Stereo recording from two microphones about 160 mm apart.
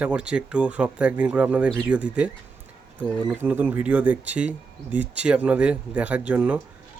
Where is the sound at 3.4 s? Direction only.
10° right (ahead or behind).